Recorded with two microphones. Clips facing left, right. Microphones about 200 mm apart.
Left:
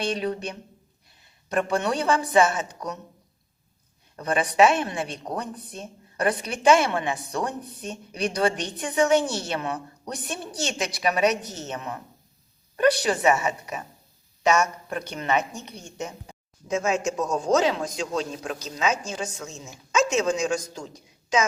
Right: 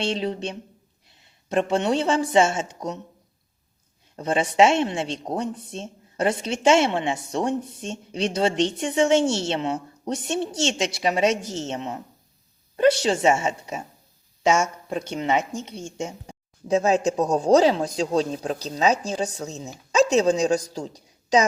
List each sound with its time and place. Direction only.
0.0 s speech: 25° right (ahead or behind)
4.2 s a woman's voice: 25° right (ahead or behind)